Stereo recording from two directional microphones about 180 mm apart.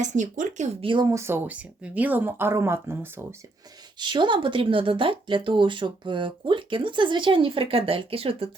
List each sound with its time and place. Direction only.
0.0 s speech: 45° right (ahead or behind)
1.1 s speech: 15° right (ahead or behind)
4.0 s speech: 25° right (ahead or behind)